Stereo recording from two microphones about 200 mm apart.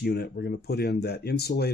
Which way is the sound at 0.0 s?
55° left (ahead or behind).